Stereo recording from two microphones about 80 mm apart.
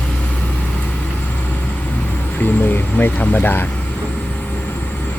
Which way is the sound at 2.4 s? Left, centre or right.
Left.